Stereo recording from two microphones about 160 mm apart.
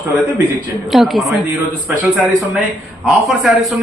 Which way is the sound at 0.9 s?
Centre (ahead or behind).